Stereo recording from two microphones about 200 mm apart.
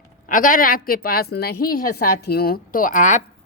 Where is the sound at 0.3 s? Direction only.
40° left (ahead or behind).